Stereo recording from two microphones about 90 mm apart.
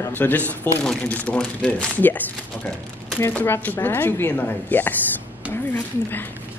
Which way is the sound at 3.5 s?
25° left (ahead or behind).